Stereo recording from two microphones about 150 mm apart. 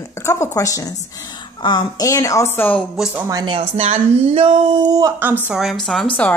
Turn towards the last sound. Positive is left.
turn(degrees=5)  # may be behind; listen again after turning